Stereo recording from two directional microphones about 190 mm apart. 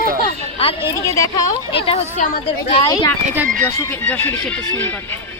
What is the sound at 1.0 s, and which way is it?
Speech, 15° left (ahead or behind).